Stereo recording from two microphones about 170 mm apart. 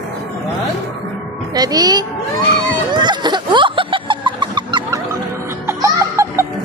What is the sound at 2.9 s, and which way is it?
Snicker, 25° right (ahead or behind).